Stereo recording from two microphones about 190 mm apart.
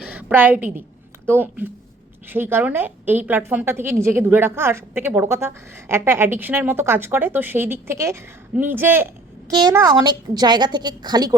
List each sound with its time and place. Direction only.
0.1 s a woman's voice: 10° right (ahead or behind)
9.5 s a woman's voice: 20° right (ahead or behind)